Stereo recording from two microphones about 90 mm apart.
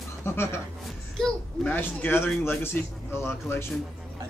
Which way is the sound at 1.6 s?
20° left (ahead or behind).